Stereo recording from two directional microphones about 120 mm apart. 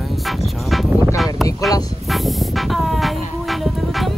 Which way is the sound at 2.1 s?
Centre (ahead or behind).